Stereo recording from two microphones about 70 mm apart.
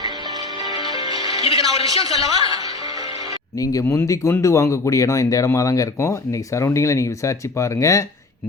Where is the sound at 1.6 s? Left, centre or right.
Right.